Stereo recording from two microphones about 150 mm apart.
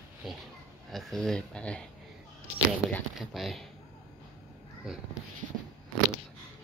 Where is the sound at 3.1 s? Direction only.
Centre (ahead or behind).